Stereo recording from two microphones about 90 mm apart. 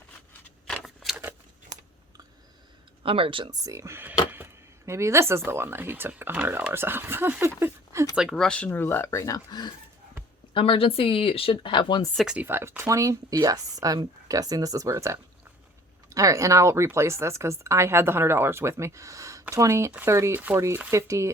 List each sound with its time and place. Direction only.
1.0 s a sound: 5° left (ahead or behind)
3.0 s speech: 85° right
3.5 s speech: 40° right (ahead or behind)
4.0 s speech: 20° right (ahead or behind)
8.1 s speech: 5° right (ahead or behind)
8.4 s speech: 10° left (ahead or behind); by 9.7 s 50° left (ahead or behind)
10.5 s speech: 85° left; by 12.0 s 60° left (ahead or behind)
12.2 s speech: 10° right (ahead or behind)
12.5 s speech: 30° right (ahead or behind)